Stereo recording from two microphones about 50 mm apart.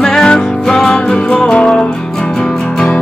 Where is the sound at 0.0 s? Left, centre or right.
Centre.